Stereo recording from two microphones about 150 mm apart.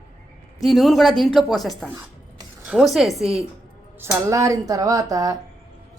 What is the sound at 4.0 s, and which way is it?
Speech, 20° right (ahead or behind).